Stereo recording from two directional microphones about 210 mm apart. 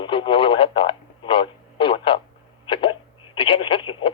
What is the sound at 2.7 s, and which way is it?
Telephone, 25° left (ahead or behind).